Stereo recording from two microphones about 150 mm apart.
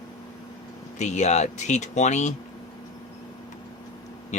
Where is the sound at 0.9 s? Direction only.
50° left (ahead or behind).